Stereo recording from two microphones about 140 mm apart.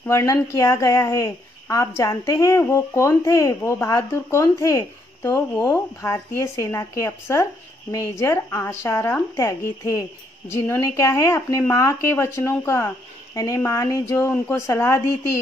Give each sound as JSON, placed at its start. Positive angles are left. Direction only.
{"t": 0.0, "sound": "a woman's voice", "side_deg": 20}